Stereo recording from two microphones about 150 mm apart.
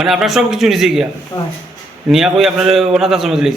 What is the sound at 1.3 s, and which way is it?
Speech, 20° left (ahead or behind).